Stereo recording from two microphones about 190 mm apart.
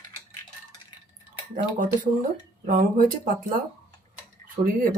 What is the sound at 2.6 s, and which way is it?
Speech, 45° right (ahead or behind).